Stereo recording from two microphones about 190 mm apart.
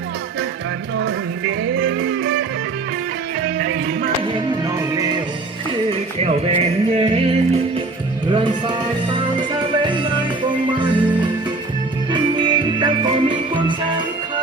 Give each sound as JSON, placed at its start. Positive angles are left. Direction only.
{"t": 1.5, "sound": "music", "side_deg": -90}
{"t": 4.9, "sound": "music", "side_deg": -20}
{"t": 5.9, "sound": "music", "side_deg": -30}
{"t": 12.1, "sound": "music", "side_deg": -25}